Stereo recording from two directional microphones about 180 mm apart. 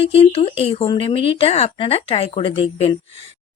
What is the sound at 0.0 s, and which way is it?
A woman's voice, 35° left (ahead or behind).